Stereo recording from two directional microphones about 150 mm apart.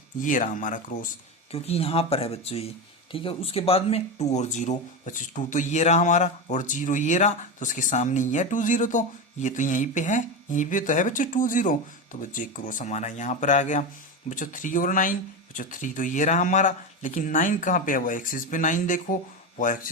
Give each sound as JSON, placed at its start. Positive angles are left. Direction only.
{"t": 0.2, "sound": "speech", "side_deg": 60}
{"t": 1.5, "sound": "speech", "side_deg": 40}